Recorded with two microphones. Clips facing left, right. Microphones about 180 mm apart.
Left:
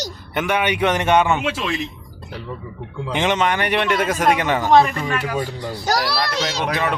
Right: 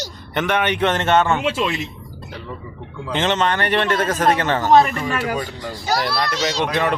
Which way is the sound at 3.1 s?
10° left (ahead or behind).